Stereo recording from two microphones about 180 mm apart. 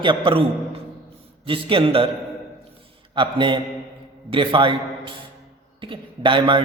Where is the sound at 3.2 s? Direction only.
25° right (ahead or behind).